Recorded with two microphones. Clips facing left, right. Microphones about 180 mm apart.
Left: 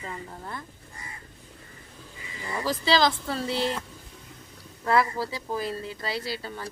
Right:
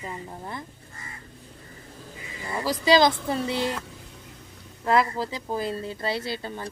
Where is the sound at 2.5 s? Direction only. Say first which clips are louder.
Right 4 dB; 15° right (ahead or behind).